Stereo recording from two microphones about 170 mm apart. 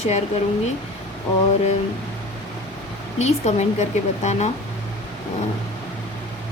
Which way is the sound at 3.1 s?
40° left (ahead or behind).